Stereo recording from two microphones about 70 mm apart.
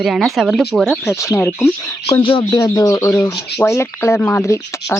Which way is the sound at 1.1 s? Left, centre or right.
Left.